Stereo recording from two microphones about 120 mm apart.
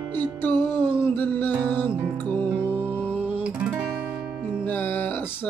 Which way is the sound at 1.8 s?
15° left (ahead or behind).